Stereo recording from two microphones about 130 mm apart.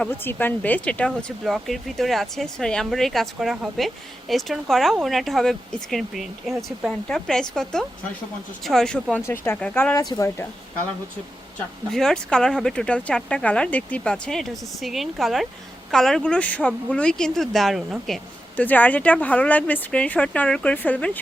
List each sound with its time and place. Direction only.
0.0 s speech: 15° left (ahead or behind)
9.2 s speech: 15° left (ahead or behind)
9.9 s speech: 25° left (ahead or behind)
11.9 s speech: 5° left (ahead or behind)
18.6 s speech: 15° left (ahead or behind)